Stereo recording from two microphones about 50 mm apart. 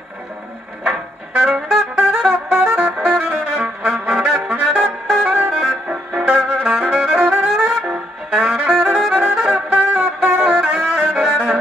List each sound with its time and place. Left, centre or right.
0.9 s saxophone: right
5.5 s music: centre
9.7 s a sound: right
9.9 s music: right